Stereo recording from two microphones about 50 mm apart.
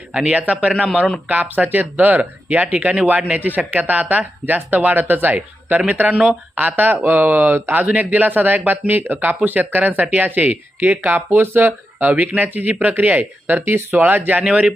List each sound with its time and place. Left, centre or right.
0.1 s a man's voice: centre
0.3 s a man's voice: right
0.7 s speech: centre
1.5 s speech: right
13.6 s speech: right